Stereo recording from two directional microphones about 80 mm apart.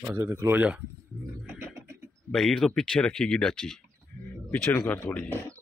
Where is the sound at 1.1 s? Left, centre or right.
Centre.